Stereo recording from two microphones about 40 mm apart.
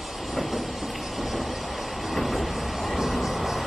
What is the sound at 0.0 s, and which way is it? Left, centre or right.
Vehicle, centre.